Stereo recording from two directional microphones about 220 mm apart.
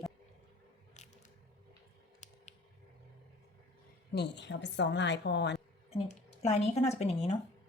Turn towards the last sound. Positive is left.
turn(degrees=30)  # may be behind; listen again after turning